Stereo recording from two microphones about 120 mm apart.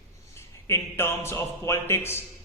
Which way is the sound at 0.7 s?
20° left (ahead or behind).